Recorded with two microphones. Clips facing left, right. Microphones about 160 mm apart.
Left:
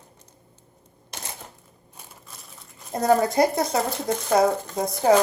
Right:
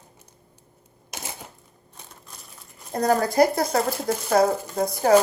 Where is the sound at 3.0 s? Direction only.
25° left (ahead or behind).